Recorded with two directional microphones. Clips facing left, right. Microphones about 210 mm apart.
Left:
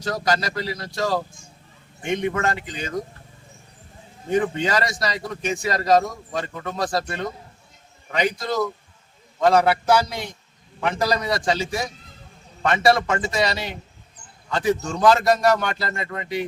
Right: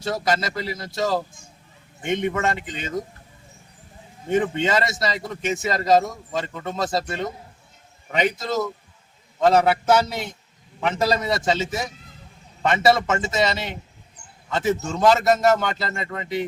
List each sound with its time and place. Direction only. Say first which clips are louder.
0.0 s a man's voice: even; 25° right (ahead or behind)
4.3 s a man's voice: even; 25° right (ahead or behind)
9.9 s a man's voice: right 1 dB; 25° right (ahead or behind)